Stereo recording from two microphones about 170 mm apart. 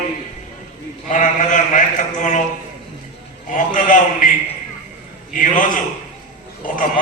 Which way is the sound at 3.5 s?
50° left (ahead or behind).